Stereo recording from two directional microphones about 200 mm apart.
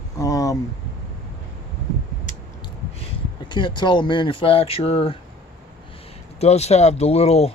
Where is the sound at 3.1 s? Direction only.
25° left (ahead or behind).